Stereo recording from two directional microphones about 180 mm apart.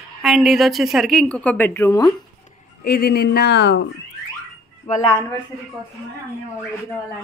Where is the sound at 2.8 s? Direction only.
60° left (ahead or behind).